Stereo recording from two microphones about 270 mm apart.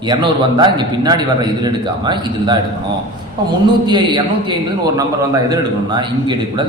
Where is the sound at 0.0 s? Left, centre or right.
Centre.